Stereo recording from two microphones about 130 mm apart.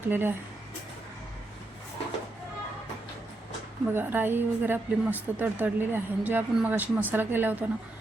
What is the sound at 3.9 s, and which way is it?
Speech, 15° right (ahead or behind).